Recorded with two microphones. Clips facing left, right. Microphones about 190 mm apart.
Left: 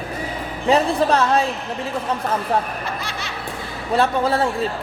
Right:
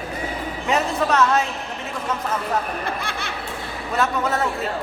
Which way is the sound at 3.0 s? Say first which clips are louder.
Right 1 dB; 55° right (ahead or behind).